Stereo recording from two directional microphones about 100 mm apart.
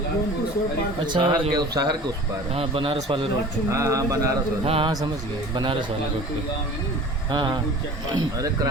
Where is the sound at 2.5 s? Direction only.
65° right (ahead or behind).